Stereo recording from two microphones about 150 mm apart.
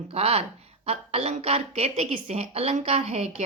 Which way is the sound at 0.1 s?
45° right (ahead or behind).